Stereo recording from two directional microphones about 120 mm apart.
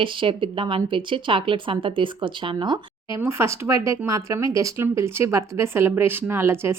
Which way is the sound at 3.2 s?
20° right (ahead or behind).